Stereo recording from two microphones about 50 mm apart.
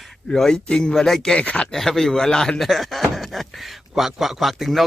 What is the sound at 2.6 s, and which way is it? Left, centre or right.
A man's voice, centre.